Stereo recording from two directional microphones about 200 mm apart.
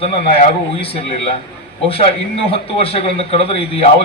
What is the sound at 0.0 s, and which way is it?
A man's voice, 30° left (ahead or behind).